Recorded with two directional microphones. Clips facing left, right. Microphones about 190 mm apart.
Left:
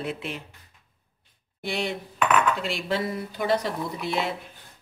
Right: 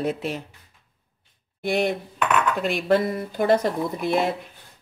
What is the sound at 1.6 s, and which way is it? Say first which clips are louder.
Speech: right 6 dB; 50° right (ahead or behind).